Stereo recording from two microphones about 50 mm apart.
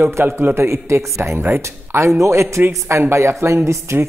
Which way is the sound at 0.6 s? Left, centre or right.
Right.